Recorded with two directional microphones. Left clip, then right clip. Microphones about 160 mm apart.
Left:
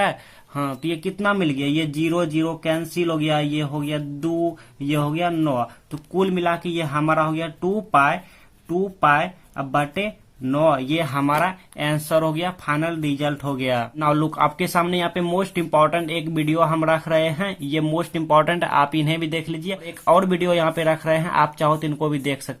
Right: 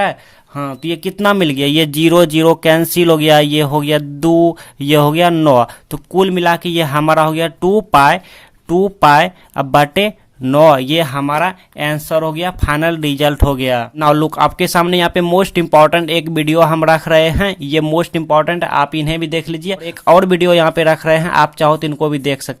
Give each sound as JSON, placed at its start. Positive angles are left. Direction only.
{"t": 0.0, "sound": "speech", "side_deg": -25}
{"t": 6.1, "sound": "speech", "side_deg": -50}
{"t": 18.3, "sound": "speech", "side_deg": -25}